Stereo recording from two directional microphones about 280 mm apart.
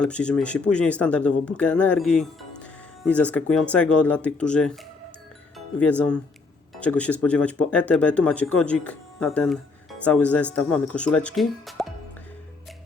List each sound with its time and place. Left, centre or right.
0.0 s speech: centre
5.8 s speech: centre